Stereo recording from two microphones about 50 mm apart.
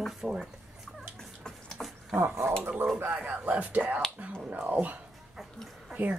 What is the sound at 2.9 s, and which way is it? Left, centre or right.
Speech, right.